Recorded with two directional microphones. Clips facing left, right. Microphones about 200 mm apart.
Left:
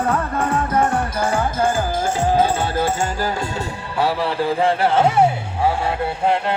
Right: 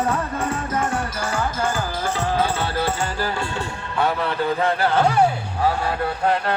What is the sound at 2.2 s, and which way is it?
Music, 15° left (ahead or behind).